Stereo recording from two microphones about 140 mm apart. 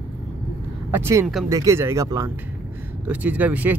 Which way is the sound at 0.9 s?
15° right (ahead or behind).